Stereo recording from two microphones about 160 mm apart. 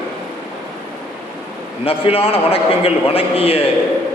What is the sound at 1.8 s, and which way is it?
A man's voice, 35° left (ahead or behind).